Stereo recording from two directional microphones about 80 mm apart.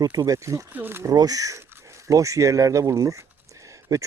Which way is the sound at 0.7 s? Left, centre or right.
Right.